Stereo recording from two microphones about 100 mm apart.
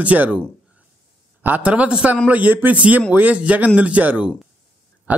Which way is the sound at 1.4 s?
15° right (ahead or behind).